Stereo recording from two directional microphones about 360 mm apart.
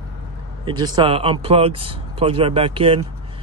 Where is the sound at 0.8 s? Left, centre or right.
Centre.